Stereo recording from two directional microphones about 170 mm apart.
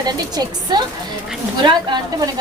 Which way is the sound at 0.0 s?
25° right (ahead or behind).